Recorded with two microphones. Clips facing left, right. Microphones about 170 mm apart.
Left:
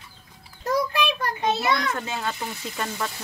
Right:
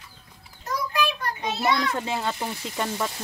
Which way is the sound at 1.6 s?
25° right (ahead or behind).